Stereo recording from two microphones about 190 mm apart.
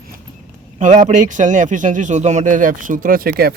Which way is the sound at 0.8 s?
40° right (ahead or behind).